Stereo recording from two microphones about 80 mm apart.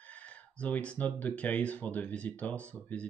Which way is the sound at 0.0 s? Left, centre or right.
Centre.